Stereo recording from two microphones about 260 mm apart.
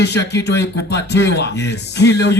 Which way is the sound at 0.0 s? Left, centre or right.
Left.